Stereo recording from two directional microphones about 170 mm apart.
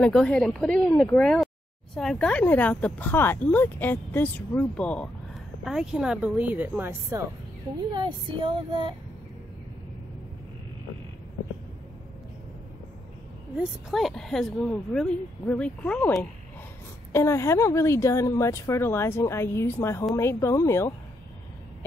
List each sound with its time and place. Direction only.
0.0 s speech: 5° left (ahead or behind)
5.6 s speech: 5° right (ahead or behind)
7.9 s female singing: 30° right (ahead or behind)
13.6 s speech: centre (ahead or behind); by 20.9 s 15° left (ahead or behind)